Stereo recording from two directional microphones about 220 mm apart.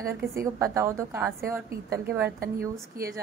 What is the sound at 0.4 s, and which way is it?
A woman's voice, 15° right (ahead or behind).